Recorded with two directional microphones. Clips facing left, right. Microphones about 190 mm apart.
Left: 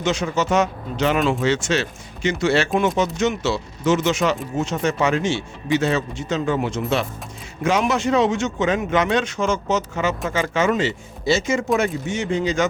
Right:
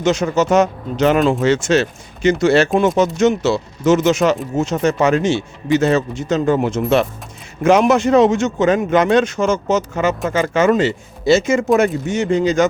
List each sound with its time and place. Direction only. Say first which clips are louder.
0.0 s speech: right 6 dB; 40° right (ahead or behind)
11.3 s speech: right 6 dB; 55° right (ahead or behind)
11.8 s speech: right 6 dB; 45° right (ahead or behind)